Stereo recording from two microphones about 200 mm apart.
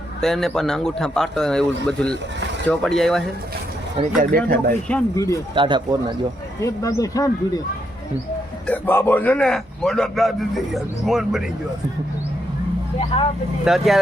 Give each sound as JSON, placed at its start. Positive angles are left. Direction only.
{"t": 0.2, "sound": "a man's voice", "side_deg": 0}
{"t": 3.9, "sound": "speech", "side_deg": -40}
{"t": 5.1, "sound": "speech", "side_deg": 15}
{"t": 5.5, "sound": "speech", "side_deg": -25}
{"t": 6.6, "sound": "speech", "side_deg": 15}
{"t": 8.6, "sound": "a man's voice", "side_deg": 10}
{"t": 13.7, "sound": "a man's voice", "side_deg": 0}